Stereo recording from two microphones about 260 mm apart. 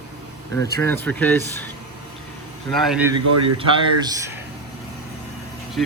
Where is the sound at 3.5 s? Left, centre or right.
Centre.